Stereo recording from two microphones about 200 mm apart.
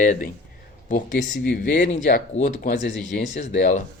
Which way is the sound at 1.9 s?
40° left (ahead or behind).